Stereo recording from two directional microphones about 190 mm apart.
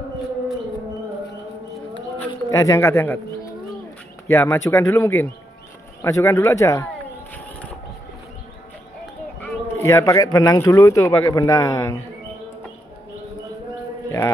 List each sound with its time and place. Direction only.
2.1 s a man's voice: 15° left (ahead or behind)
4.3 s speech: 15° left (ahead or behind)
9.4 s speech: 10° left (ahead or behind)